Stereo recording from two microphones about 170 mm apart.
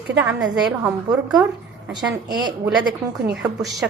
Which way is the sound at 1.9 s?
25° right (ahead or behind).